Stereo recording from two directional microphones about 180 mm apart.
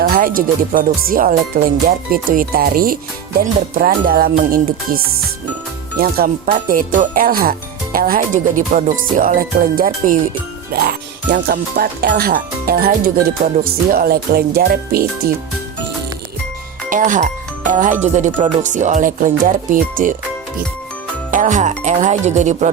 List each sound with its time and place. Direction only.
0.0 s speech: 50° right (ahead or behind)
6.0 s speech: 55° right (ahead or behind)
10.8 s speech: 65° right (ahead or behind)
16.9 s speech: 45° right (ahead or behind)
21.2 s speech: 45° right (ahead or behind)